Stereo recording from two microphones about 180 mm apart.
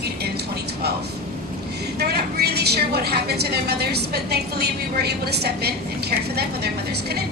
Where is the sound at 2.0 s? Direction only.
60° right (ahead or behind).